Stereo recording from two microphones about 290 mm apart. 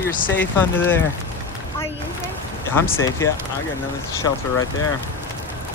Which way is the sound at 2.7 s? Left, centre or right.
Centre.